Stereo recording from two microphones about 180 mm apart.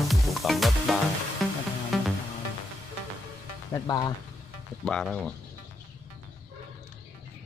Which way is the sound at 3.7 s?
20° left (ahead or behind).